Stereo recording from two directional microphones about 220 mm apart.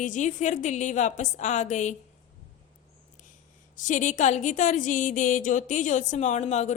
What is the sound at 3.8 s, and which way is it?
Speech, 35° left (ahead or behind).